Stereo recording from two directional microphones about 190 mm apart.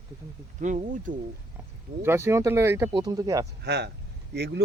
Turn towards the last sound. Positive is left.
turn(degrees=-60)  # may be behind; listen again after turning